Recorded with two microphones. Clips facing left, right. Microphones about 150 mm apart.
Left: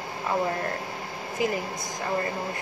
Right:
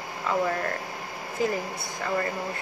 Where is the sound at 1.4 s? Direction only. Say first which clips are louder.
Even; 15° left (ahead or behind).